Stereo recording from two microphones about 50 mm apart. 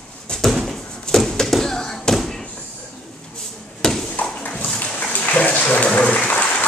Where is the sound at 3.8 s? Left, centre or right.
Centre.